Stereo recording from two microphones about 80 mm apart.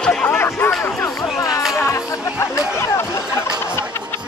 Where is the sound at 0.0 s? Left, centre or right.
Centre.